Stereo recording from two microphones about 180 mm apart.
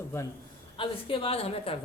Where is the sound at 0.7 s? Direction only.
30° left (ahead or behind).